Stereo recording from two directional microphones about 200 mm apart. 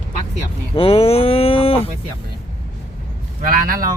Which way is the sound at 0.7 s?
30° left (ahead or behind).